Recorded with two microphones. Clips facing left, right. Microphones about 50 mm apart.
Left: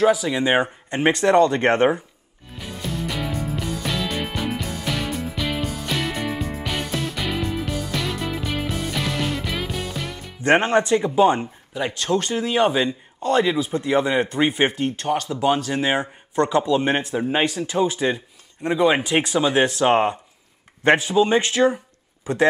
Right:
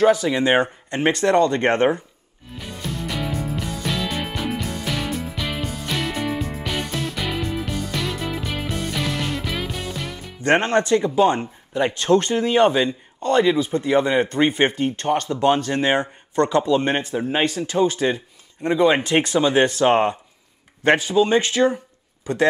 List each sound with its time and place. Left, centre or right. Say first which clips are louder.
0.0 s speech: right 2 dB; centre
0.8 s speech: left 1 dB; centre
2.5 s music: left 1 dB; centre
10.4 s speech: left 1 dB; centre
11.7 s speech: right 5 dB; centre
14.9 s speech: right 2 dB; centre
17.6 s speech: right 2 dB; centre
18.0 s speech: right 1 dB; centre
20.8 s speech: even; centre
22.3 s a man's voice: even; left